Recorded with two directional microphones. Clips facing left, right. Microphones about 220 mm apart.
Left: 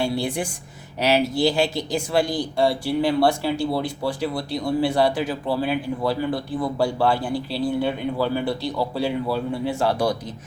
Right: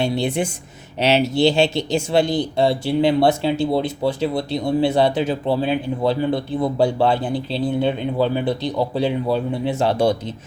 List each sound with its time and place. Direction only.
0.0 s speech: 20° right (ahead or behind)